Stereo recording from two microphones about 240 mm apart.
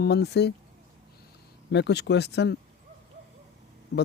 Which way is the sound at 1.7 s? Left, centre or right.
Left.